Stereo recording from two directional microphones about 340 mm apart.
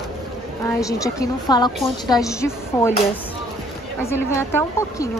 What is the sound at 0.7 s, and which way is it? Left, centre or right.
A woman's voice, centre.